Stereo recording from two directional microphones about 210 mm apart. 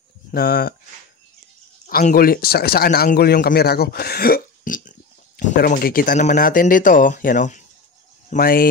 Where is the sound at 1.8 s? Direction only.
40° left (ahead or behind).